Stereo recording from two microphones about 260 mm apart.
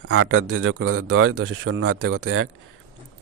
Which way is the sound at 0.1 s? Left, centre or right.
Right.